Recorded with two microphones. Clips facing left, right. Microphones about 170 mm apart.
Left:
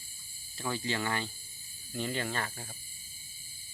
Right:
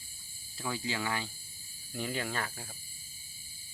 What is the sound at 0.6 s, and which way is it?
Speech, 5° right (ahead or behind).